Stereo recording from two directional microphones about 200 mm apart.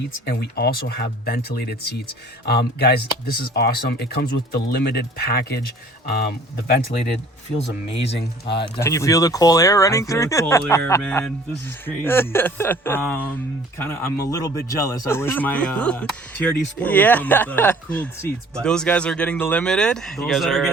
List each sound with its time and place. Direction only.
0.3 s speech: 55° left (ahead or behind)
8.6 s speech: 20° left (ahead or behind); by 20.7 s centre (ahead or behind)